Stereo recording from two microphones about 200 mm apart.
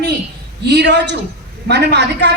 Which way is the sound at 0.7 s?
60° right (ahead or behind).